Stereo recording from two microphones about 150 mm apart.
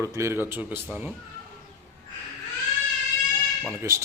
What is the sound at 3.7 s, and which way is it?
Speech, 20° right (ahead or behind).